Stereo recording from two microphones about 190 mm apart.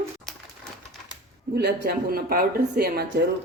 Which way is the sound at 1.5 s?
60° right (ahead or behind).